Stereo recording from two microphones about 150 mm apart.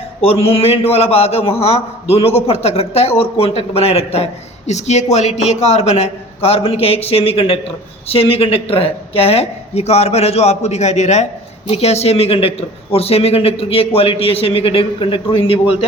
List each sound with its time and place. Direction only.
0.2 s a man's voice: 40° left (ahead or behind)